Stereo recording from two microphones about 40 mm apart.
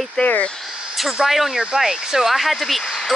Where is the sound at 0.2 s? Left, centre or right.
Left.